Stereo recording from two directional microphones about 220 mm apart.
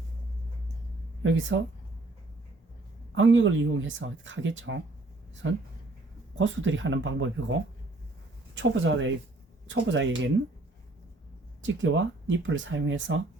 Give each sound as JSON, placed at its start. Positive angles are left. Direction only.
{"t": 1.2, "sound": "speech", "side_deg": -60}
{"t": 3.2, "sound": "speech", "side_deg": -60}
{"t": 11.6, "sound": "speech", "side_deg": -60}